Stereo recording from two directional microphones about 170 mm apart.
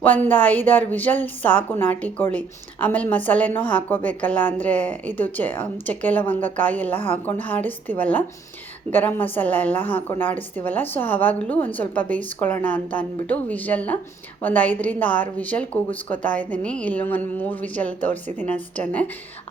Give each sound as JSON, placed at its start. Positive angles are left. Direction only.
{"t": 0.0, "sound": "a woman's voice", "side_deg": 10}